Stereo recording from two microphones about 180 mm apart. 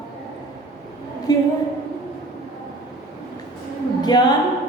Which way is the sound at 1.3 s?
20° left (ahead or behind).